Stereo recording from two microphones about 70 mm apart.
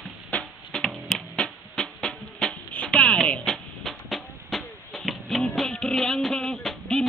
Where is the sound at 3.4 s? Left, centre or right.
Centre.